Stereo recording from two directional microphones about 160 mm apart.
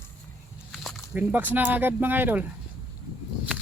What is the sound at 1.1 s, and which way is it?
Speech, 10° right (ahead or behind).